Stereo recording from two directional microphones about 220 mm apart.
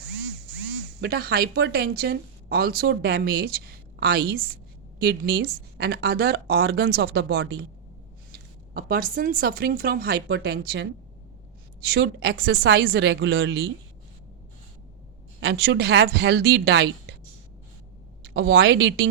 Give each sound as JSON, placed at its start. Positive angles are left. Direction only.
{"t": 1.0, "sound": "speech", "side_deg": -45}
{"t": 8.7, "sound": "speech", "side_deg": -40}
{"t": 11.9, "sound": "speech", "side_deg": -45}
{"t": 15.4, "sound": "speech", "side_deg": -50}
{"t": 18.3, "sound": "speech", "side_deg": -50}